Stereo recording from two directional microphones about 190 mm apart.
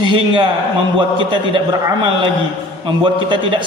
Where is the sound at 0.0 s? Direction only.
25° right (ahead or behind).